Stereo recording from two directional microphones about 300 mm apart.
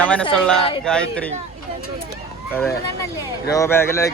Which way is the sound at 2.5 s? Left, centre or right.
Centre.